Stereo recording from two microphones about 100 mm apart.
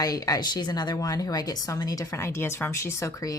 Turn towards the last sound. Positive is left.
turn(degrees=30)  # may be behind; listen again after turning